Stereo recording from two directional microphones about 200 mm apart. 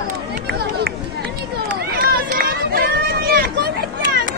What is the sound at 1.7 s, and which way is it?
Run, 45° right (ahead or behind).